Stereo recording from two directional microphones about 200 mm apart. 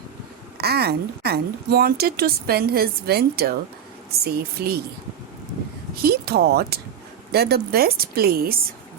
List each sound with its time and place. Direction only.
0.6 s speech: 50° right (ahead or behind)
6.0 s speech: 50° right (ahead or behind)